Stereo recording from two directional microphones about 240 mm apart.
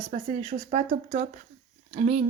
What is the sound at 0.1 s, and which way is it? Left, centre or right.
A woman's voice, right.